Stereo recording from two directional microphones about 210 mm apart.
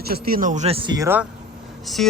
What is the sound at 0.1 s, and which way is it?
Speech, 45° right (ahead or behind).